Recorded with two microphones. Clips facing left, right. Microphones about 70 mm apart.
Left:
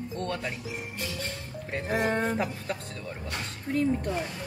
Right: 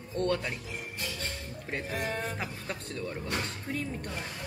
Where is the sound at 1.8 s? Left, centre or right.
Left.